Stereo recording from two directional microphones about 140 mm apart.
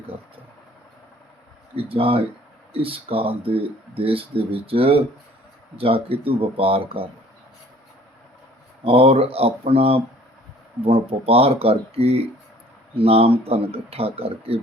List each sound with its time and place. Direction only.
1.7 s speech: 40° right (ahead or behind)
8.8 s speech: 40° right (ahead or behind)